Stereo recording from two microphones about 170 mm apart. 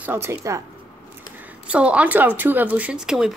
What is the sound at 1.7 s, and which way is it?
Speech, 5° right (ahead or behind).